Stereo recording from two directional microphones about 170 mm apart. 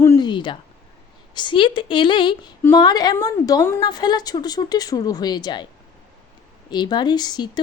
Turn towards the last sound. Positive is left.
turn(degrees=25)  # may be behind; listen again after turning